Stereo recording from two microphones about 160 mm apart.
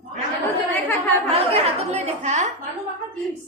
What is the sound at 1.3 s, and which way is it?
A woman's voice, 40° right (ahead or behind).